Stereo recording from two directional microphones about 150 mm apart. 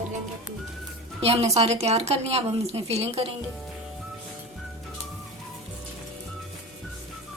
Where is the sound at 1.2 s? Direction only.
45° right (ahead or behind).